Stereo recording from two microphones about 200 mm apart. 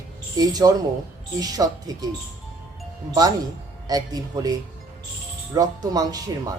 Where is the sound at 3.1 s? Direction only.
20° right (ahead or behind).